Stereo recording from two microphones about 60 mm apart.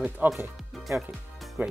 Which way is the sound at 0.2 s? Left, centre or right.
Right.